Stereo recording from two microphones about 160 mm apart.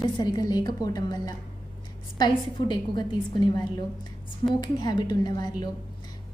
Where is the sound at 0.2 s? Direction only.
25° left (ahead or behind).